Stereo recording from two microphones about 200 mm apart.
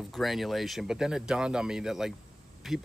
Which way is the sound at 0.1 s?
Centre (ahead or behind).